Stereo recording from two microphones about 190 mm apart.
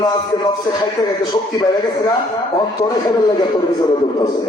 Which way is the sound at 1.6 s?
20° left (ahead or behind).